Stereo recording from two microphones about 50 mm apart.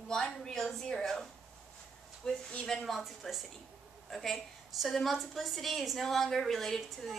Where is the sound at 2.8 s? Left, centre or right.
Centre.